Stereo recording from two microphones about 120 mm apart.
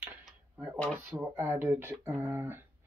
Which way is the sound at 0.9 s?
15° right (ahead or behind).